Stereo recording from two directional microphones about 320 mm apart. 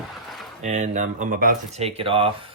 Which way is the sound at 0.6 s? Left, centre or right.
Right.